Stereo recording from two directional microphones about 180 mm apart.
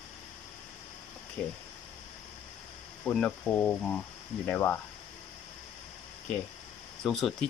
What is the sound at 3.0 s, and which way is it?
Speech, 5° left (ahead or behind).